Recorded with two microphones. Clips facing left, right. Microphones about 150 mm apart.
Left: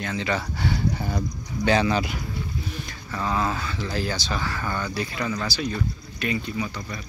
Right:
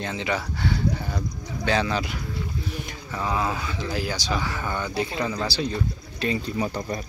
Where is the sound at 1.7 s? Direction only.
5° left (ahead or behind).